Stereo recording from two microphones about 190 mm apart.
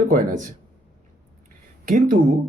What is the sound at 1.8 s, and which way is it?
Speech, 45° right (ahead or behind).